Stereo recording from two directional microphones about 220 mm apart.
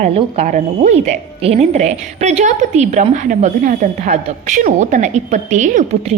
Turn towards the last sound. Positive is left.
turn(degrees=-35)  # may be behind; listen again after turning